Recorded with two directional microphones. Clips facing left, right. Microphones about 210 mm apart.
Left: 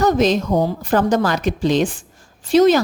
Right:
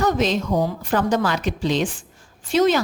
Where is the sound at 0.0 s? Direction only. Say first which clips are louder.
Left 4 dB; 40° left (ahead or behind).